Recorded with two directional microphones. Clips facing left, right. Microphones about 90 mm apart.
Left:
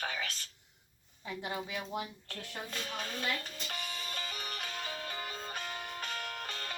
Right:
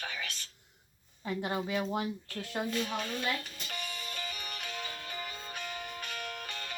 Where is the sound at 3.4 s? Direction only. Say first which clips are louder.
Even; 30° left (ahead or behind).